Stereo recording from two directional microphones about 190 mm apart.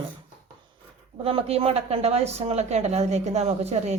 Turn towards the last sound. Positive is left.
turn(degrees=-35)  # may be behind; listen again after turning